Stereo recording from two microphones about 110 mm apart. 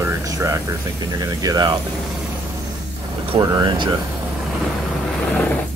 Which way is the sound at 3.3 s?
45° right (ahead or behind).